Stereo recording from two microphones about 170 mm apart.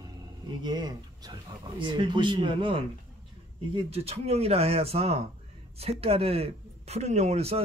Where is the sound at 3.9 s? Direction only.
35° right (ahead or behind).